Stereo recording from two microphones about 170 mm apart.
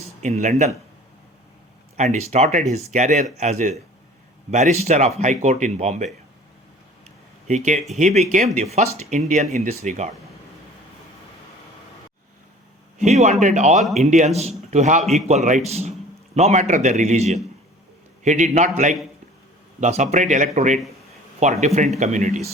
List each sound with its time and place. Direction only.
0.2 s speech: 45° right (ahead or behind)
2.0 s speech: 45° right (ahead or behind)
7.4 s a man's voice: 45° right (ahead or behind)
13.0 s a man's voice: 40° right (ahead or behind)
19.8 s speech: 45° right (ahead or behind)